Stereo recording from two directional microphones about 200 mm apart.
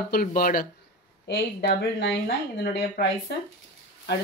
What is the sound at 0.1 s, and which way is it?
Speech, 45° left (ahead or behind).